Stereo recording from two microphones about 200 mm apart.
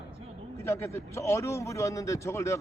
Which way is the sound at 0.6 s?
15° left (ahead or behind).